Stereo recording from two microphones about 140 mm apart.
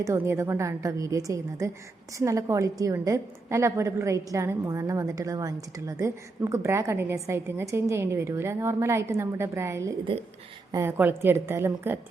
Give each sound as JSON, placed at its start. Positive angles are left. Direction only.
{"t": 0.0, "sound": "a woman's voice", "side_deg": -20}